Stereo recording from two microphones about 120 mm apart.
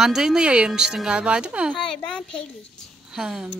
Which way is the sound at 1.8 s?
5° left (ahead or behind).